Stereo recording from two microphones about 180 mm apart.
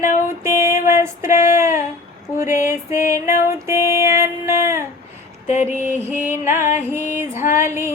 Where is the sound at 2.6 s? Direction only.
15° right (ahead or behind).